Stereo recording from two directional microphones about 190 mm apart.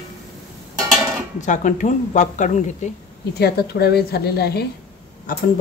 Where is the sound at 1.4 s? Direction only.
40° left (ahead or behind).